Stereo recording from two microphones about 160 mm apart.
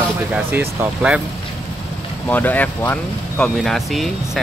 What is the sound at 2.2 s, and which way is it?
Speech, 10° left (ahead or behind).